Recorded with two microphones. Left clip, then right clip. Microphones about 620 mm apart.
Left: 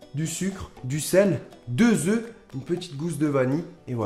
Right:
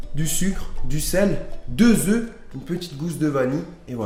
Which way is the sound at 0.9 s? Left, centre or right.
Left.